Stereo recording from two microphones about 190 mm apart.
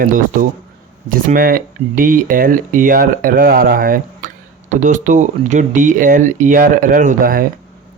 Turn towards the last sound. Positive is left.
turn(degrees=-45)  # may be behind; listen again after turning